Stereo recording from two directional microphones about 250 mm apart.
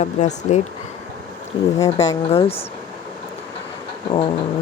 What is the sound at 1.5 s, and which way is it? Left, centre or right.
Speech, centre.